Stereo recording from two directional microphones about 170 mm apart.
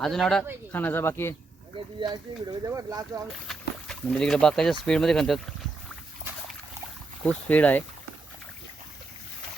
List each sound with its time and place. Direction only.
0.0 s speech: centre (ahead or behind)
2.0 s speech: 25° right (ahead or behind)
3.4 s speech: 5° left (ahead or behind)
7.3 s speech: 10° left (ahead or behind)